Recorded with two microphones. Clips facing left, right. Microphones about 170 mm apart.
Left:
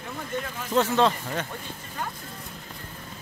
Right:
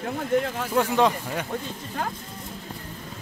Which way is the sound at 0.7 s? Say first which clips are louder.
Even; 15° right (ahead or behind).